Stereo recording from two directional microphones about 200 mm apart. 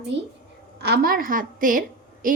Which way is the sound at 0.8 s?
50° right (ahead or behind).